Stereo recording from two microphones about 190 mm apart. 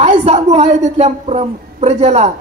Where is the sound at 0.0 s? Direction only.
35° right (ahead or behind).